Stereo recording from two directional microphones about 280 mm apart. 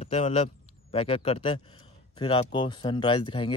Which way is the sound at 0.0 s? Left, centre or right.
Left.